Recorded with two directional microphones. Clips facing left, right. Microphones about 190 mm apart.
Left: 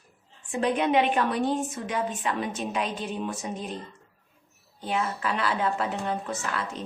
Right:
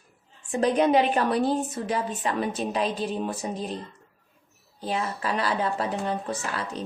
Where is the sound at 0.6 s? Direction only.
40° right (ahead or behind).